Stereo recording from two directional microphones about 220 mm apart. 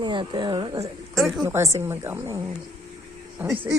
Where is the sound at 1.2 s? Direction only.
Centre (ahead or behind).